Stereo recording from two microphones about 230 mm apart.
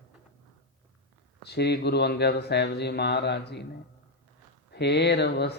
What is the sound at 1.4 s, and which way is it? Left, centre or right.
Mantra, left.